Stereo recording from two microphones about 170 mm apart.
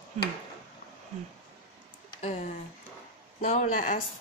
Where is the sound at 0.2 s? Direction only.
40° right (ahead or behind).